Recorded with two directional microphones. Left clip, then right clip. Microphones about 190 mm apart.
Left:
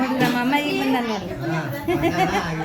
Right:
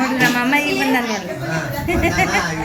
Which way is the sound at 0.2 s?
15° left (ahead or behind).